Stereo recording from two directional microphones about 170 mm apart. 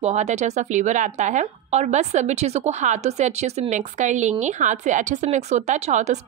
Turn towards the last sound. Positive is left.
turn(degrees=-45)  # may be behind; listen again after turning